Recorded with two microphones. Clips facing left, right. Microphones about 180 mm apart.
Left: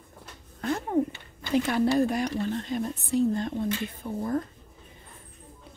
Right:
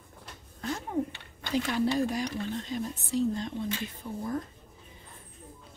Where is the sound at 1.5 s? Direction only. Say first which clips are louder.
Left 4 dB; 55° left (ahead or behind).